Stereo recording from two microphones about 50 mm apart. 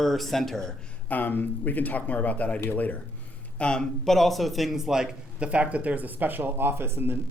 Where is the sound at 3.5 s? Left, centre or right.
Centre.